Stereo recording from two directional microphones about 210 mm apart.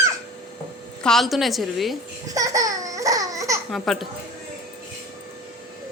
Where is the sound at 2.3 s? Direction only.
15° right (ahead or behind).